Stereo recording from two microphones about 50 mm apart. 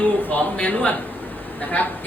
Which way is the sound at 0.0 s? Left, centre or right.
Left.